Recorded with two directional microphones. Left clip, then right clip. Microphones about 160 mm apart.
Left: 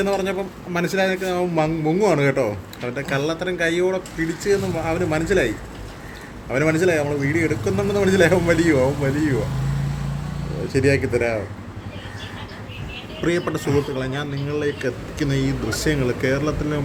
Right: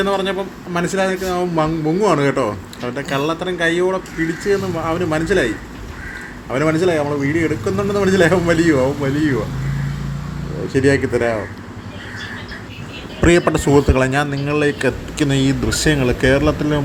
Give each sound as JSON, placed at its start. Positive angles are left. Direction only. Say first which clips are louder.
{"t": 0.0, "sound": "speech", "louder": "right 3 dB", "side_deg": -5}
{"t": 6.5, "sound": "speech", "louder": "right 2 dB", "side_deg": -5}
{"t": 10.8, "sound": "speech", "louder": "right 3 dB", "side_deg": -10}
{"t": 13.2, "sound": "speech", "louder": "right 8 dB", "side_deg": -35}